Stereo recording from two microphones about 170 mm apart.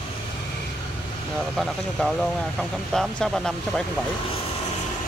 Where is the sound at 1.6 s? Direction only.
Centre (ahead or behind).